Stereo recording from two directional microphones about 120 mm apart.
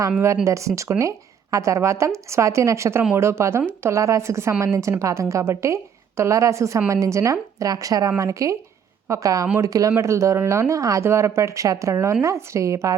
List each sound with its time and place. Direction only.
0.4 s a woman's voice: 25° right (ahead or behind)